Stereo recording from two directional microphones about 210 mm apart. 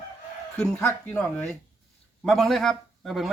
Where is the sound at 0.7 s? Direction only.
5° left (ahead or behind).